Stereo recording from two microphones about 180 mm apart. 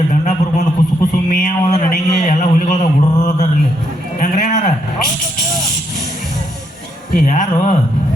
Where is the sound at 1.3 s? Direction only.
50° left (ahead or behind).